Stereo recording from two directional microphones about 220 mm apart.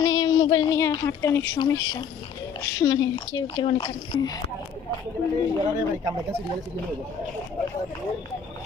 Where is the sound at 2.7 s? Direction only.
20° left (ahead or behind).